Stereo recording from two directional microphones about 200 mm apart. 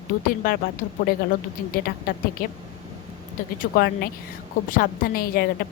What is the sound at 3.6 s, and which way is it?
A woman's voice, 45° left (ahead or behind).